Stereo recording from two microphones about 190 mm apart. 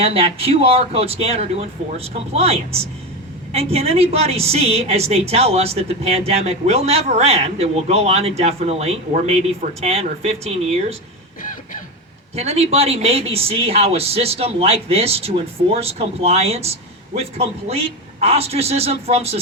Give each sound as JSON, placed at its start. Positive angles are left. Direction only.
{"t": 0.0, "sound": "a woman's voice", "side_deg": -30}
{"t": 12.4, "sound": "a woman's voice", "side_deg": -35}